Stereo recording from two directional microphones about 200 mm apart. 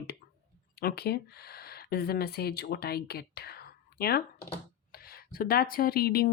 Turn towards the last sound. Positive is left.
turn(degrees=50)  # may be behind; listen again after turning